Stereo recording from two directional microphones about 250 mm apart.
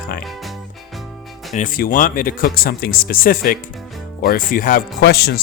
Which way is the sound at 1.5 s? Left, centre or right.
Left.